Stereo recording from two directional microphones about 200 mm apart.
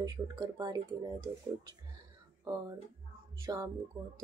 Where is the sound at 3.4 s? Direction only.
20° right (ahead or behind).